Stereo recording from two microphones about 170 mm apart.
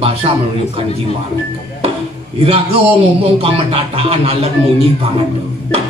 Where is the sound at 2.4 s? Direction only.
35° right (ahead or behind).